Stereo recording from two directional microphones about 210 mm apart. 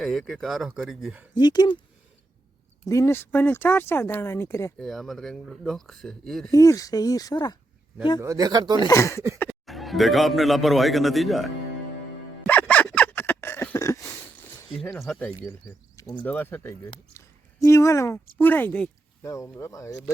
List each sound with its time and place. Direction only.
0.0 s a man's voice: centre (ahead or behind)
1.4 s speech: 20° left (ahead or behind)
2.8 s speech: 15° left (ahead or behind)
4.9 s a man's voice: centre (ahead or behind)
6.5 s speech: 15° left (ahead or behind)
8.2 s speech: 15° right (ahead or behind)
8.8 s speech: 15° left (ahead or behind)
9.4 s a man's voice: 5° left (ahead or behind)
12.4 s a sound: 5° left (ahead or behind)
15.0 s a man's voice: 5° left (ahead or behind)
17.2 s a sound: 15° left (ahead or behind)
18.3 s speech: 10° left (ahead or behind)